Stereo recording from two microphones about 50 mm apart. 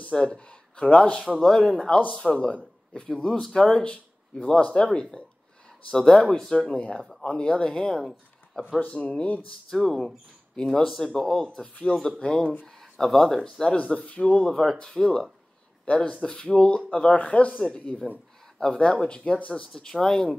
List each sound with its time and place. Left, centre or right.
0.1 s speech: centre
1.2 s speech: centre
3.2 s speech: centre
3.9 s speech: left
6.3 s speech: centre
7.2 s speech: left
8.7 s speech: left
9.7 s speech: centre
10.5 s speech: centre
12.6 s speech: centre
13.8 s speech: left
14.4 s speech: centre
15.8 s speech: centre
19.5 s speech: centre